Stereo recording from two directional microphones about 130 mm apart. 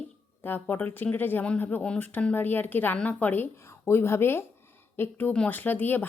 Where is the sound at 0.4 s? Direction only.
15° left (ahead or behind).